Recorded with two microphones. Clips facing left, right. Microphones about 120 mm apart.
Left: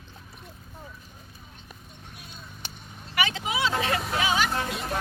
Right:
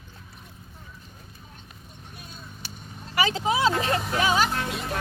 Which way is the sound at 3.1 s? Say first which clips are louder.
Right 4 dB; 35° right (ahead or behind).